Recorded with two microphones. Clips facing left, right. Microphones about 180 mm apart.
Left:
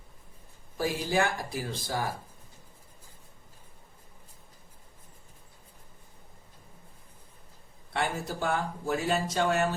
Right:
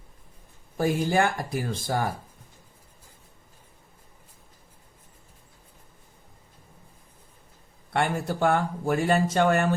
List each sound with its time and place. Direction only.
0.8 s speech: 50° right (ahead or behind)
7.9 s speech: 55° right (ahead or behind)